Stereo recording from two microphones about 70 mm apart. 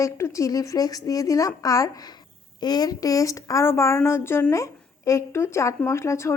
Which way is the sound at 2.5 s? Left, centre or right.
Left.